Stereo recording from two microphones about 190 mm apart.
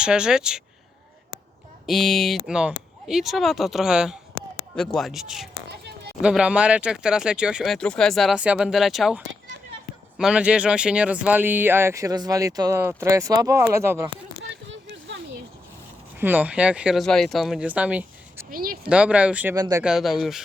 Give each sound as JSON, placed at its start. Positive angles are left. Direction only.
{"t": 0.0, "sound": "speech", "side_deg": -5}
{"t": 1.9, "sound": "speech", "side_deg": 0}
{"t": 14.4, "sound": "a sound", "side_deg": -75}
{"t": 16.1, "sound": "speech", "side_deg": -10}
{"t": 18.5, "sound": "speech", "side_deg": -50}
{"t": 18.9, "sound": "speech", "side_deg": -5}
{"t": 19.5, "sound": "speech", "side_deg": -20}
{"t": 19.8, "sound": "speech", "side_deg": 0}